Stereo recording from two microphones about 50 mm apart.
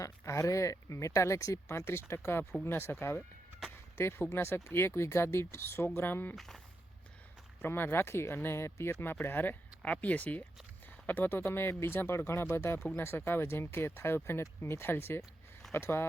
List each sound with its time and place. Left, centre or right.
0.0 s speech: left
4.4 s speech: left
4.6 s speech: left
6.3 s speech: centre
7.6 s speech: left
9.2 s speech: left
9.9 s speech: left
11.3 s speech: left